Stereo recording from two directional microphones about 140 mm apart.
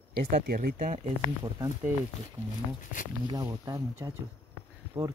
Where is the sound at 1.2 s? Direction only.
30° right (ahead or behind).